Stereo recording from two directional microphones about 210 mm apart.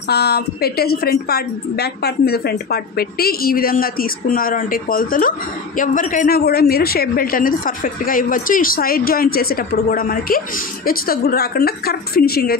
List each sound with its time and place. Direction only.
0.1 s a woman's voice: 50° left (ahead or behind)